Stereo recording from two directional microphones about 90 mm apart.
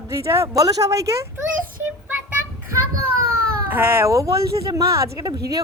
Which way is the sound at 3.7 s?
25° right (ahead or behind).